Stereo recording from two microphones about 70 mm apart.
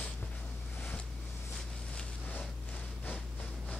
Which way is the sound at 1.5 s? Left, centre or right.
Centre.